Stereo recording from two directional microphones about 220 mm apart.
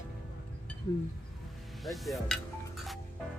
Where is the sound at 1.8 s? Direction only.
Centre (ahead or behind).